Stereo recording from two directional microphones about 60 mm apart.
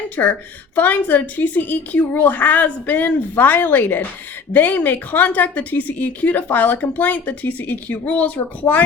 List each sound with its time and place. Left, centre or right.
0.2 s a woman's voice: left
0.8 s a woman's voice: left